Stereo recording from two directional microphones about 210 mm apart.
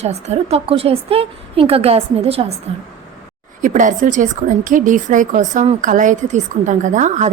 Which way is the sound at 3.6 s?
40° right (ahead or behind).